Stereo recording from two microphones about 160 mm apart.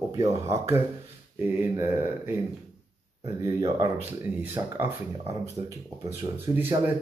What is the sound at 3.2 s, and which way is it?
Speech, 25° right (ahead or behind).